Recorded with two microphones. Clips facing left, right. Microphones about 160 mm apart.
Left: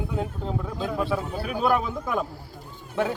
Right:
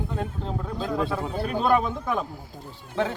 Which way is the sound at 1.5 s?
5° left (ahead or behind).